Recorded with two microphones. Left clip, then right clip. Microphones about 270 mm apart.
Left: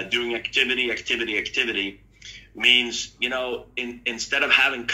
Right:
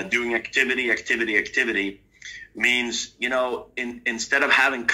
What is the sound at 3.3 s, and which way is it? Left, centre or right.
Speech, right.